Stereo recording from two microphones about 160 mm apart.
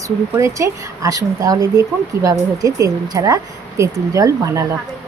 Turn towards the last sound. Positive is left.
turn(degrees=-20)  # may be behind; listen again after turning